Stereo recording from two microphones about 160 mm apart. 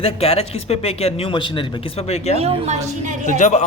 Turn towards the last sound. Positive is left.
turn(degrees=50)  # may be behind; listen again after turning